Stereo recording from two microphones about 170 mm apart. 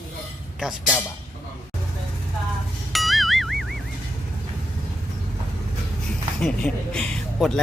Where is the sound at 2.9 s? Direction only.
Centre (ahead or behind).